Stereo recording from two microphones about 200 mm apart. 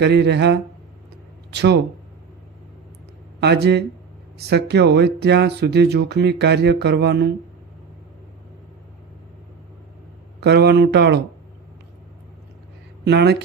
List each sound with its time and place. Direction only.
0.0 s speech: 55° right (ahead or behind)
3.4 s speech: 55° right (ahead or behind)
10.4 s speech: 55° right (ahead or behind)
13.1 s speech: 55° right (ahead or behind)